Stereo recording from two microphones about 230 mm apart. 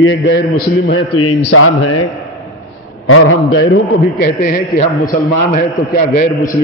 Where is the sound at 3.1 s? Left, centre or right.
Left.